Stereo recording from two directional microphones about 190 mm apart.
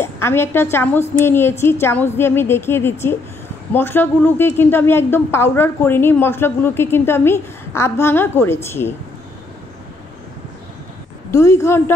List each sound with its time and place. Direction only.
0.0 s a woman's voice: 15° left (ahead or behind)
11.3 s speech: 15° left (ahead or behind)